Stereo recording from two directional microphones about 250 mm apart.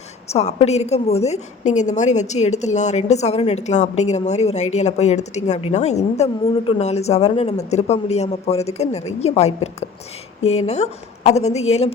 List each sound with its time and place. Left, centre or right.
0.3 s a woman's voice: left